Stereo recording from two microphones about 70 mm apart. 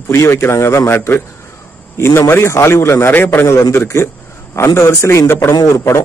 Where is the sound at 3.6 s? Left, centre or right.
Left.